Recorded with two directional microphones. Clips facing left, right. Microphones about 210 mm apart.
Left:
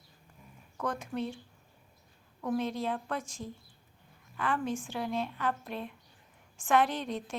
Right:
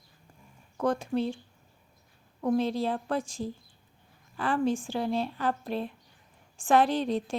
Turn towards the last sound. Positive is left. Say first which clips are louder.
# right 7 dB
turn(degrees=-30)  # may be behind; listen again after turning